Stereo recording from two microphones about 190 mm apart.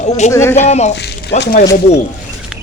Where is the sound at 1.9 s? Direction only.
35° left (ahead or behind).